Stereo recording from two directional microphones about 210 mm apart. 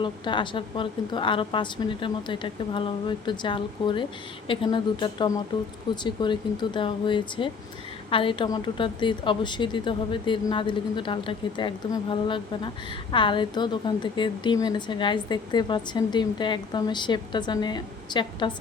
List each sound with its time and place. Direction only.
0.0 s a woman's voice: 20° left (ahead or behind)